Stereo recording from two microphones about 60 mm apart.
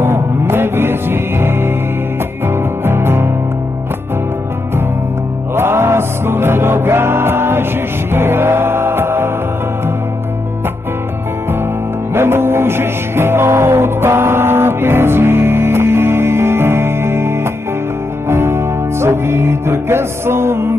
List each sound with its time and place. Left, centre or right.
0.0 s music: right
5.5 s music: right
12.1 s music: right